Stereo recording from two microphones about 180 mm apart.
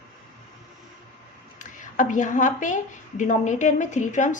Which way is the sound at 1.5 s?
45° left (ahead or behind).